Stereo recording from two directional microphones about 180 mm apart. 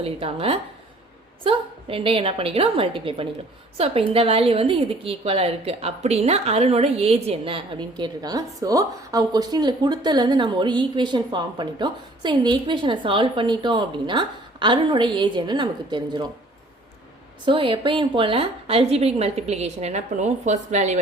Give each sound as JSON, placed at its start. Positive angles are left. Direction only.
{"t": 0.0, "sound": "a woman's voice", "side_deg": -35}
{"t": 17.4, "sound": "a woman's voice", "side_deg": -25}